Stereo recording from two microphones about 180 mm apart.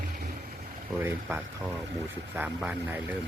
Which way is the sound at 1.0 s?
10° right (ahead or behind).